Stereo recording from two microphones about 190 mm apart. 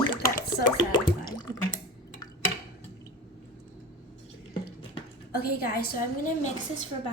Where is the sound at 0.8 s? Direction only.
20° left (ahead or behind).